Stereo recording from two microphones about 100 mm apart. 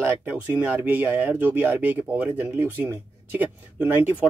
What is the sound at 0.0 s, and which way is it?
Speech, 25° right (ahead or behind).